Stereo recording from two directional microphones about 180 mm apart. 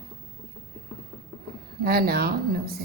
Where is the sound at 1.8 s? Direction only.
55° right (ahead or behind).